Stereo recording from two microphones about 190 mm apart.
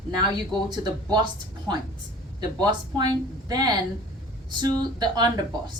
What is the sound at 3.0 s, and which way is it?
A woman's voice, 20° right (ahead or behind).